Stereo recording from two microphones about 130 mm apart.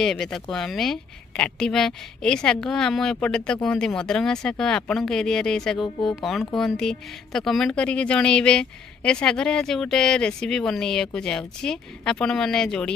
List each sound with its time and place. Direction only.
0.0 s speech: 5° left (ahead or behind)